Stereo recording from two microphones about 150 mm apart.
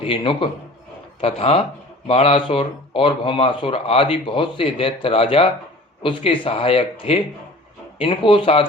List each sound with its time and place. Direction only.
0.0 s speech: 35° left (ahead or behind)